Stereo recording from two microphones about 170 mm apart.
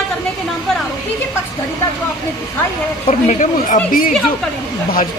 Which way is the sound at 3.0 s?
50° left (ahead or behind).